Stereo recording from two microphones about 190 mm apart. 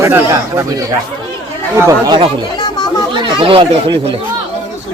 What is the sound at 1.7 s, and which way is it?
Speech, 15° right (ahead or behind).